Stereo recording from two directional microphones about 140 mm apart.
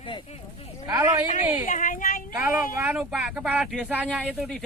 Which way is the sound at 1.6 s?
65° left (ahead or behind).